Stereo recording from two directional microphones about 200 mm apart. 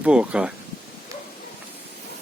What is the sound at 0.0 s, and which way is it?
Speech, 5° right (ahead or behind).